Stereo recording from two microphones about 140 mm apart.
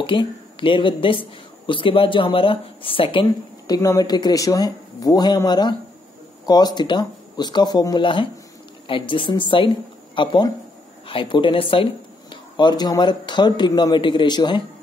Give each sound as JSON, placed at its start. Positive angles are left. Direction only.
{"t": 0.0, "sound": "speech", "side_deg": 35}